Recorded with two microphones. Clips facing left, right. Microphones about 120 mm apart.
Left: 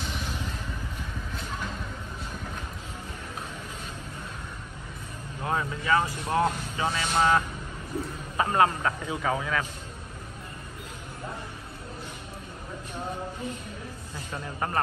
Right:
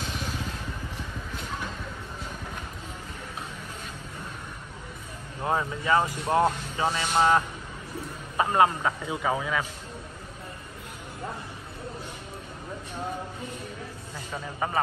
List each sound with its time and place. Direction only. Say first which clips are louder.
5.4 s speech: right 2 dB; 25° right (ahead or behind)
14.3 s speech: right 1 dB; 5° right (ahead or behind)